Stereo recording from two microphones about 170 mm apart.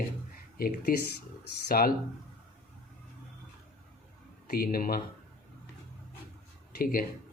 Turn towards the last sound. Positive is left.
turn(degrees=55)  # may be behind; listen again after turning